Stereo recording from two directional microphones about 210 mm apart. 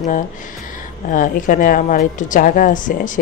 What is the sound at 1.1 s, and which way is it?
A woman's voice, 40° left (ahead or behind).